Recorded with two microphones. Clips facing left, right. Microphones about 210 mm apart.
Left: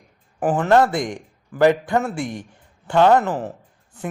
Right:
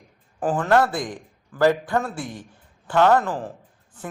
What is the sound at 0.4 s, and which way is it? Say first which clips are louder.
A man's voice: left 3 dB; 20° left (ahead or behind).